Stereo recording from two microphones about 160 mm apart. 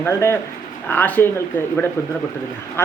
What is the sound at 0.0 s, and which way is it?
A woman's voice, 15° left (ahead or behind).